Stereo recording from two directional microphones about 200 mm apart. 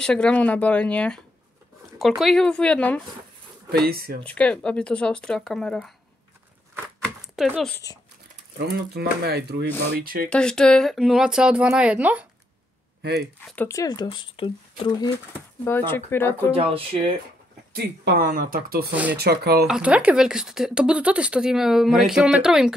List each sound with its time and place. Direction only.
0.0 s speech: 5° left (ahead or behind)
3.7 s speech: 50° right (ahead or behind)
4.2 s speech: 5° left (ahead or behind)
6.7 s a sound: 5° right (ahead or behind)
8.5 s speech: 55° right (ahead or behind)
10.3 s speech: 5° left (ahead or behind)
13.0 s speech: 55° right (ahead or behind)
13.5 s speech: 10° left (ahead or behind)
15.9 s speech: 10° left (ahead or behind)
16.5 s speech: 30° right (ahead or behind)
17.7 s speech: 50° right (ahead or behind)
19.7 s speech: 5° right (ahead or behind)